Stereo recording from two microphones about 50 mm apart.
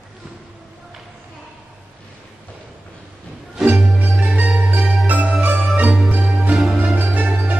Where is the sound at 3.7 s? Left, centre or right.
Centre.